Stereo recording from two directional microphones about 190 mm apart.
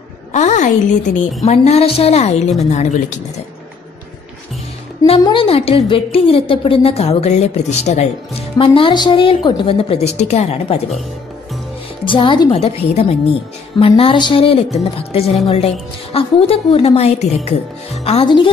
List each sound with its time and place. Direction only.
0.3 s a woman's voice: 40° left (ahead or behind)
5.2 s a woman's voice: 25° left (ahead or behind)
12.0 s a woman's voice: 25° left (ahead or behind)